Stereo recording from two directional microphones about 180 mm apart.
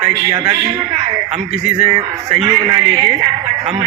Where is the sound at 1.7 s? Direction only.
35° right (ahead or behind).